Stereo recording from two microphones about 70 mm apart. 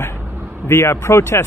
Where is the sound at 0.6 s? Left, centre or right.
Left.